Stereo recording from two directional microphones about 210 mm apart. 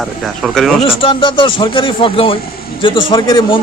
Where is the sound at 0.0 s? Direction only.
Centre (ahead or behind).